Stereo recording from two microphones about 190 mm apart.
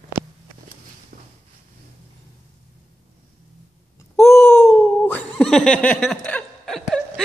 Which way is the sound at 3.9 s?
10° left (ahead or behind).